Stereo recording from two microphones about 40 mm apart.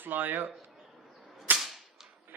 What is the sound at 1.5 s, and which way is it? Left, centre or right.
Whip, right.